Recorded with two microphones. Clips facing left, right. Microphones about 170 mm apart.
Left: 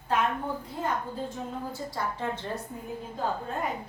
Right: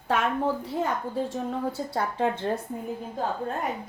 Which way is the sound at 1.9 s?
60° right (ahead or behind).